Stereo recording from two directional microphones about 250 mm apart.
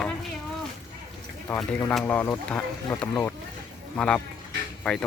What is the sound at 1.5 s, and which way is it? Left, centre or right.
Speech, centre.